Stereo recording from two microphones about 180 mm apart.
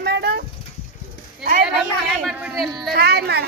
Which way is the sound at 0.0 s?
65° right (ahead or behind).